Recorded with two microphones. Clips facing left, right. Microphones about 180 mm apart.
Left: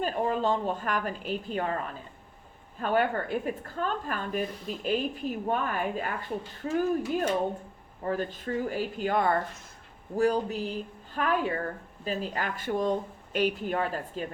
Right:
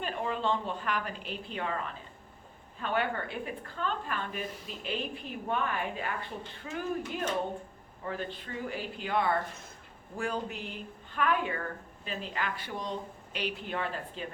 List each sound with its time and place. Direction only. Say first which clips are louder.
0.0 s speech: left 5 dB; 40° left (ahead or behind)
2.8 s a woman's voice: left 5 dB; 45° left (ahead or behind)